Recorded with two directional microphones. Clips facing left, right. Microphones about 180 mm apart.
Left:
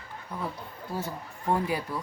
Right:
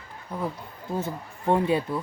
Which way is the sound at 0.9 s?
25° right (ahead or behind).